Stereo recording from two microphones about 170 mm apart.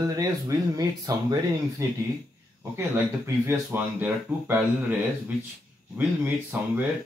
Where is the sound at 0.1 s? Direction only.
20° right (ahead or behind).